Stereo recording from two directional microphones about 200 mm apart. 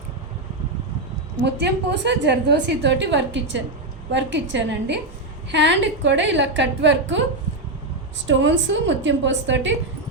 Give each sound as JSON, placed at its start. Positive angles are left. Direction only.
{"t": 1.5, "sound": "a woman's voice", "side_deg": -60}
{"t": 8.3, "sound": "a woman's voice", "side_deg": -65}